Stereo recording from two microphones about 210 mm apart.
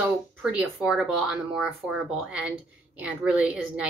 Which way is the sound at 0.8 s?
Centre (ahead or behind).